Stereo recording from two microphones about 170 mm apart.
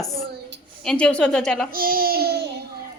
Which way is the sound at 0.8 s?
5° left (ahead or behind).